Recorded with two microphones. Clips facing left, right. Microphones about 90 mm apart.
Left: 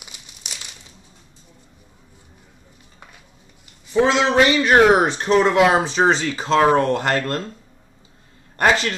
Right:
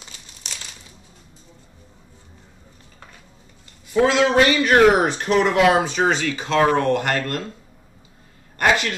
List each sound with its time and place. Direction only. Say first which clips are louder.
0.0 s crumpling: even; 15° left (ahead or behind)
3.9 s speech: even; 25° left (ahead or behind)
8.5 s a man's voice: left 1 dB; 30° left (ahead or behind)